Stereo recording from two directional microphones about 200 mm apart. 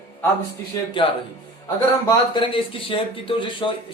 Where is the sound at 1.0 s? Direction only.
25° left (ahead or behind).